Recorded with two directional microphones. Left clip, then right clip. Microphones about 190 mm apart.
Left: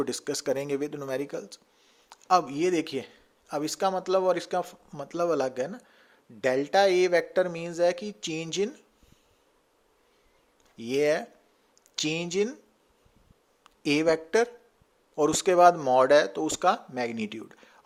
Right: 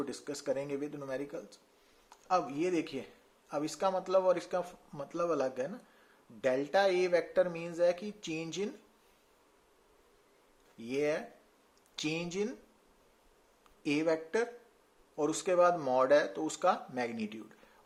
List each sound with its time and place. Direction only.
0.0 s speech: 50° left (ahead or behind)
10.8 s speech: 40° left (ahead or behind)
13.7 s speech: 40° left (ahead or behind)